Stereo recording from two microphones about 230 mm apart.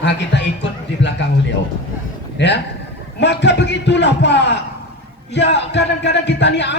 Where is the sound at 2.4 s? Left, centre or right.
Left.